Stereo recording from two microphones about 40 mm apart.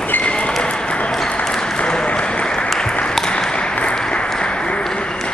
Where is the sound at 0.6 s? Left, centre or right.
Left.